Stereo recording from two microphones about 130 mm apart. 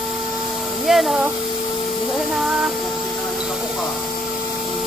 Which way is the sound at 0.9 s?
5° right (ahead or behind).